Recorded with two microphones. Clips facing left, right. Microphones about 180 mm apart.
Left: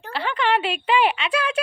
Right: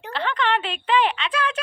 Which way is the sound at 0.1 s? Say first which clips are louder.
Left 1 dB; 10° left (ahead or behind).